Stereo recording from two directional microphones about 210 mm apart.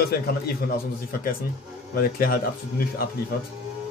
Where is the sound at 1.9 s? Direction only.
45° left (ahead or behind).